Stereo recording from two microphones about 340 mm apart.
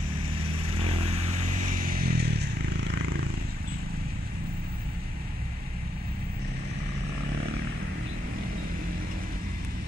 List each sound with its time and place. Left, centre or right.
0.7 s vehicle: centre